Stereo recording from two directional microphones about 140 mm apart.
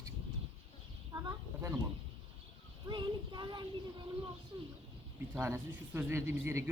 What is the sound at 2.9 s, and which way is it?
Child singing, 30° right (ahead or behind).